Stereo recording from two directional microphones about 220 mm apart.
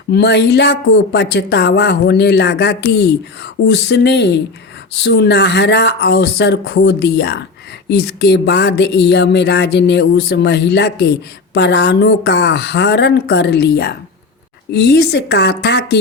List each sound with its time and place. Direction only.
0.1 s speech: 50° left (ahead or behind)